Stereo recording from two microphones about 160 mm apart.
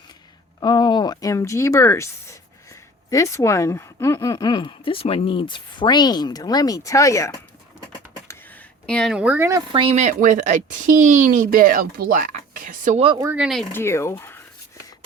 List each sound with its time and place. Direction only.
0.6 s speech: 25° left (ahead or behind)
8.3 s a sound: 10° left (ahead or behind); by 9.6 s 15° right (ahead or behind)
9.7 s speech: 40° right (ahead or behind); by 13.0 s 55° right (ahead or behind)
13.3 s speech: centre (ahead or behind)
13.7 s speech: 15° left (ahead or behind)